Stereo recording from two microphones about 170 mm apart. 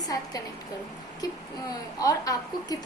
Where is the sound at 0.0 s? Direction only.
20° left (ahead or behind).